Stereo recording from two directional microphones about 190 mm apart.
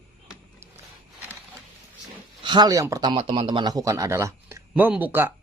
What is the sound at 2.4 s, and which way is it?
A man's voice, 20° right (ahead or behind).